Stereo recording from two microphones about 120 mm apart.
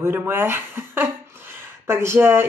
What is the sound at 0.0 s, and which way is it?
Speech, 15° right (ahead or behind).